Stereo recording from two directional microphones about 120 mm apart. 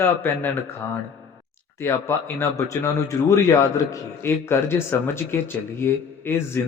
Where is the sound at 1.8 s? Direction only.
20° left (ahead or behind).